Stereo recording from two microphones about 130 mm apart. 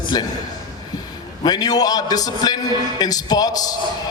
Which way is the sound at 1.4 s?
30° left (ahead or behind).